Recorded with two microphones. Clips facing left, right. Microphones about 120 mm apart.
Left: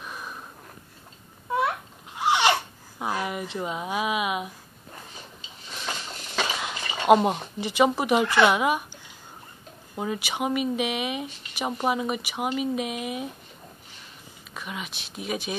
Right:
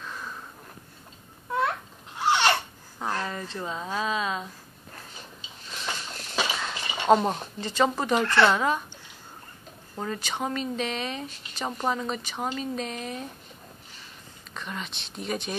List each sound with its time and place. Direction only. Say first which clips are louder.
0.0 s a sound: even; 15° left (ahead or behind)
1.5 s babbling: left 1 dB; 10° left (ahead or behind)
6.6 s speech: left 1 dB; 10° left (ahead or behind)
9.9 s speech: left 2 dB; 10° left (ahead or behind)
14.5 s speech: even; 5° left (ahead or behind)